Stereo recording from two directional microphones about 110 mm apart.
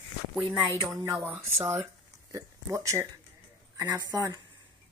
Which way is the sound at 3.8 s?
40° right (ahead or behind).